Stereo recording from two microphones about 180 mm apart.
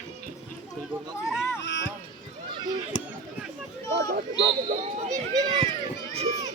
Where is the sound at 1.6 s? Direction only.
80° left.